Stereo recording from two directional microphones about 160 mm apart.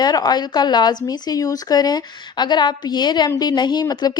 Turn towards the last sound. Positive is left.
turn(degrees=25)  # may be behind; listen again after turning